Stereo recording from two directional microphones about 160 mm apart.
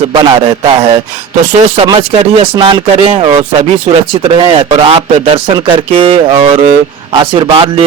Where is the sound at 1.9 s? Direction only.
35° right (ahead or behind).